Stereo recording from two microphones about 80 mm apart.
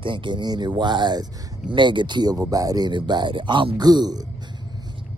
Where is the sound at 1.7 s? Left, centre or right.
Right.